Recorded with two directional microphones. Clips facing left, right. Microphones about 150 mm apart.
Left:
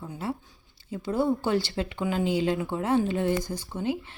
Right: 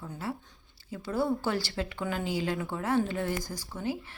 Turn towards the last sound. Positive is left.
turn(degrees=20)  # may be behind; listen again after turning